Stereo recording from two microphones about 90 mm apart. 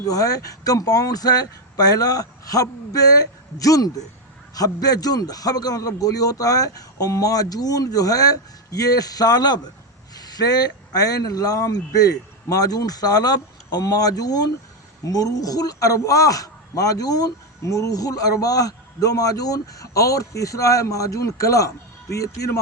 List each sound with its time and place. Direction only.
0.0 s a man's voice: 40° left (ahead or behind)